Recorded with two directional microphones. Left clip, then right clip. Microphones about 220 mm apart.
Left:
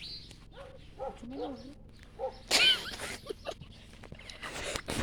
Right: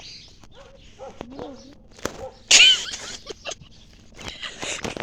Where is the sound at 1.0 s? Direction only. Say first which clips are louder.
Even; 55° left (ahead or behind).